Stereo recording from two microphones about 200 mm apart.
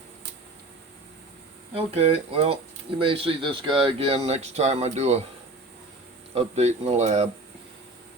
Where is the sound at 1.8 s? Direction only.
30° right (ahead or behind).